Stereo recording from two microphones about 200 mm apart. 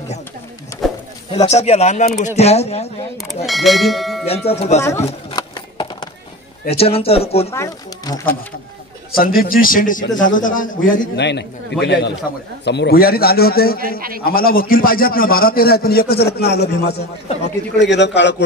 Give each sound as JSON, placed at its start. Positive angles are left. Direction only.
{"t": 0.8, "sound": "a sound", "side_deg": 0}
{"t": 1.3, "sound": "speech", "side_deg": 30}
{"t": 3.2, "sound": "bell", "side_deg": 0}
{"t": 4.3, "sound": "speech", "side_deg": 30}
{"t": 4.8, "sound": "a sound", "side_deg": 15}
{"t": 6.7, "sound": "speech", "side_deg": 30}
{"t": 7.5, "sound": "speech", "side_deg": 15}
{"t": 9.1, "sound": "a man's voice", "side_deg": 45}
{"t": 11.1, "sound": "a man's voice", "side_deg": 60}
{"t": 13.9, "sound": "a man's voice", "side_deg": -45}
{"t": 14.2, "sound": "a man's voice", "side_deg": 50}